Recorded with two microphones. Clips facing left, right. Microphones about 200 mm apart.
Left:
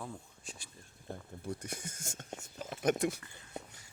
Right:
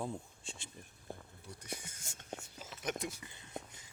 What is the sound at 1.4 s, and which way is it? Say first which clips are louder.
Speech: left 6 dB; 50° left (ahead or behind).